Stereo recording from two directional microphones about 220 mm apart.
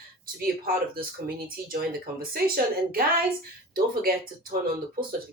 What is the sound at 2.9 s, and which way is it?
Speech, 45° right (ahead or behind).